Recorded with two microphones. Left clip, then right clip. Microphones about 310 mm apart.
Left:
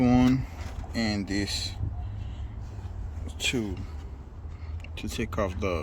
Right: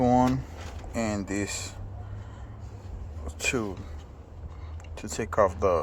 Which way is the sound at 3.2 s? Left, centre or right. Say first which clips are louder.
Right 1 dB; right.